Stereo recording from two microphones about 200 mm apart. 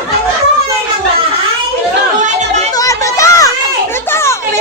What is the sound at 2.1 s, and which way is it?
Chatter, 35° right (ahead or behind).